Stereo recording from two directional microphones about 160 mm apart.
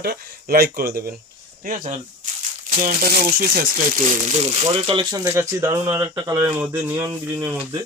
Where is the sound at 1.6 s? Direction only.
55° right (ahead or behind); by 5.1 s 30° right (ahead or behind).